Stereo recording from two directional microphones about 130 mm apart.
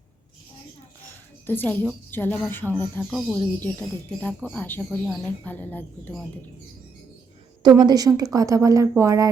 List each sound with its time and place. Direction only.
1.5 s speech: 15° left (ahead or behind)
4.9 s speech: 5° right (ahead or behind)
5.5 s speech: 15° left (ahead or behind)
7.6 s a woman's voice: 35° right (ahead or behind)